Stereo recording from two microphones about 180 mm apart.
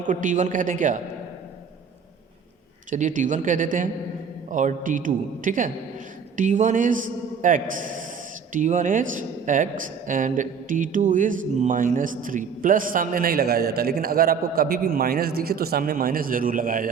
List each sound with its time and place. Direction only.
0.1 s speech: 45° right (ahead or behind)
2.9 s speech: 45° right (ahead or behind)